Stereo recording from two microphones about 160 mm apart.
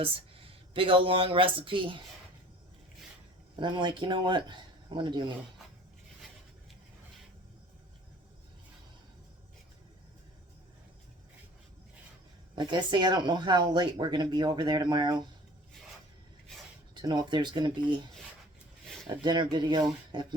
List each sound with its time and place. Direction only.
0.0 s speech: 35° right (ahead or behind)
3.5 s speech: 30° right (ahead or behind)
12.5 s speech: 30° right (ahead or behind)
16.9 s speech: 30° right (ahead or behind)
19.0 s speech: 30° right (ahead or behind)